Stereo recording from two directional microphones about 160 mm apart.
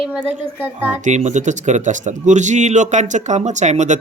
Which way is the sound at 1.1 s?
50° right (ahead or behind).